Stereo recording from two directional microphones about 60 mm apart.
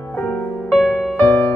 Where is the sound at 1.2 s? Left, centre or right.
Left.